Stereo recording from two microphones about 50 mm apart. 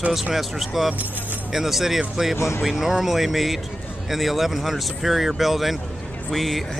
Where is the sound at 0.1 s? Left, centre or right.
Centre.